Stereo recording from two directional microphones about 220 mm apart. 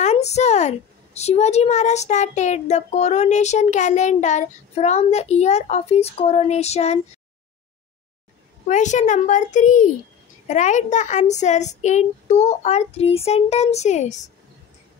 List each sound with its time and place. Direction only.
0.0 s a woman's voice: 30° left (ahead or behind)
8.6 s a woman's voice: 35° left (ahead or behind)